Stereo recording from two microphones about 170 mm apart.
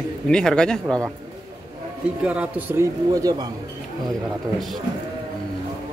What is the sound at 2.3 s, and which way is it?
Speech, 10° right (ahead or behind).